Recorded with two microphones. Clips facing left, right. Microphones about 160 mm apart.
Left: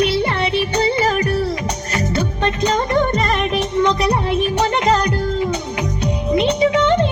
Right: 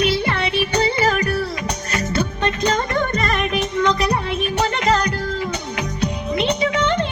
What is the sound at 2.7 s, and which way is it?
Music, 20° left (ahead or behind).